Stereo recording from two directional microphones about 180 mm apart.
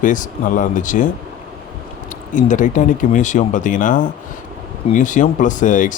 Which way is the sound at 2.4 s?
45° left (ahead or behind).